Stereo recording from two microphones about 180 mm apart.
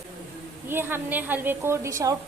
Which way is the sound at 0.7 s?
10° right (ahead or behind).